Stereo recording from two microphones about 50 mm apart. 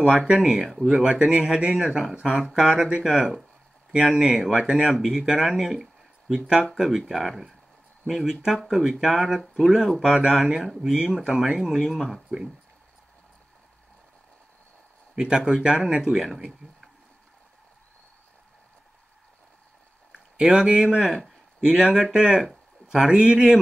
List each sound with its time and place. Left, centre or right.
0.4 s speech: centre
0.8 s speech: centre
15.1 s speech: centre
20.1 s speech: centre
21.1 s a sound: centre
21.7 s speech: centre